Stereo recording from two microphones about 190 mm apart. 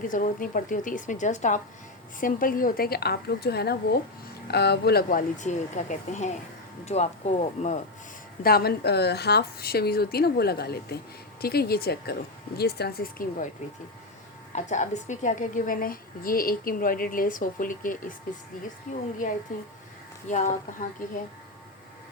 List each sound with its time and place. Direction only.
0.0 s a woman's voice: 45° left (ahead or behind)
8.4 s speech: 55° left (ahead or behind)
14.5 s a woman's voice: 40° left (ahead or behind)
20.2 s speech: 40° left (ahead or behind)